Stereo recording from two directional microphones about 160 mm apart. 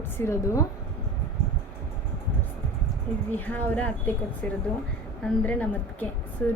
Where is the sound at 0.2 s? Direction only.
15° left (ahead or behind).